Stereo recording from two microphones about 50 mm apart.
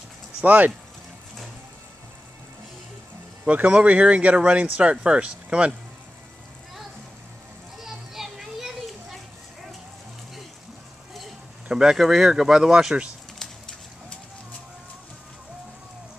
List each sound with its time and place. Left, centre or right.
0.4 s speech: right
3.4 s speech: right
7.8 s children playing: centre
11.8 s speech: centre